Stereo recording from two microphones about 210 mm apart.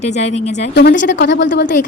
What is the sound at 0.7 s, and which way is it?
Speech, 55° left (ahead or behind).